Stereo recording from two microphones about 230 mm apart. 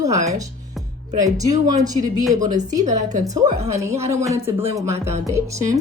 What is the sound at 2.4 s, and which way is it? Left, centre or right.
Speech, right.